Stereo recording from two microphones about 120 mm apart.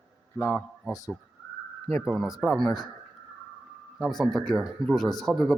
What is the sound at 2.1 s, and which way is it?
Speech, 5° right (ahead or behind).